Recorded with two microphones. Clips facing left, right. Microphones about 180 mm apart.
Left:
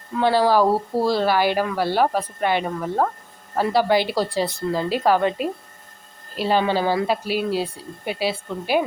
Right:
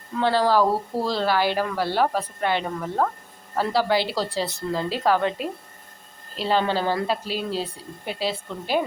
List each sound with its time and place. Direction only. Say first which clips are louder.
0.2 s speech: left 2 dB; 10° left (ahead or behind)